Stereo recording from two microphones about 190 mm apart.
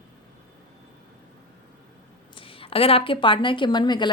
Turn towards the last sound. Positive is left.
turn(degrees=25)  # may be behind; listen again after turning